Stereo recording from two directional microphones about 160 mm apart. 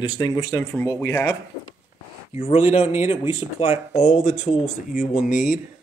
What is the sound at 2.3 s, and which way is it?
Speech, 45° left (ahead or behind).